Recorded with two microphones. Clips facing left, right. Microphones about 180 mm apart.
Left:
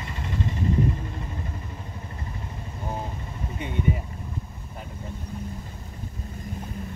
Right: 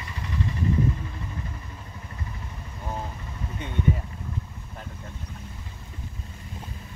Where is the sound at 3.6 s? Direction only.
10° left (ahead or behind).